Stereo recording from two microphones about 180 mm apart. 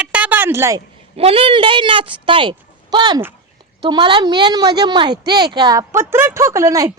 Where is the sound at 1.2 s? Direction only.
30° right (ahead or behind).